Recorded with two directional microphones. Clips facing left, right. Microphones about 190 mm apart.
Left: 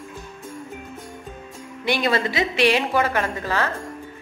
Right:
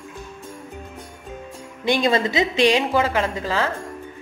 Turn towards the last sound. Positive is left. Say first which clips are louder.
# right 1 dB
turn(degrees=-15)  # may be behind; listen again after turning